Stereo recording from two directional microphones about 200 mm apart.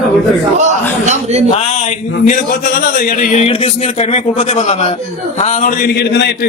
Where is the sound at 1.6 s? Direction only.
35° left (ahead or behind).